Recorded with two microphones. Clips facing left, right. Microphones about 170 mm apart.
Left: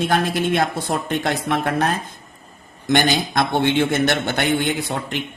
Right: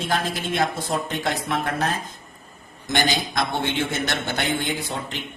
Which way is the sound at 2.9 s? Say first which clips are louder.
Left 5 dB; 60° left (ahead or behind).